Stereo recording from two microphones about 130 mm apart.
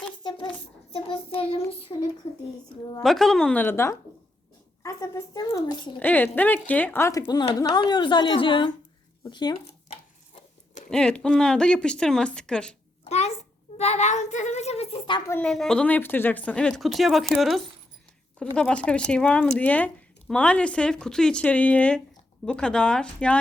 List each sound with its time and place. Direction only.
0.2 s hands: 35° left (ahead or behind)
0.9 s child singing: 45° left (ahead or behind)
1.9 s a woman's voice: 25° left (ahead or behind)
3.0 s a woman's voice: centre (ahead or behind); by 6.0 s 35° left (ahead or behind)
6.0 s a woman's voice: 15° left (ahead or behind); by 9.6 s 35° left (ahead or behind)
10.8 s speech: 5° left (ahead or behind)
13.1 s a child's voice: 55° left (ahead or behind)
15.3 s speech: 5° left (ahead or behind)